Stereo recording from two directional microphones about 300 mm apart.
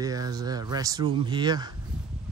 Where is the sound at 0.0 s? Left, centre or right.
Centre.